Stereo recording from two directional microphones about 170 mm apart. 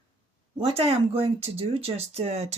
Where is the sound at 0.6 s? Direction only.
35° right (ahead or behind).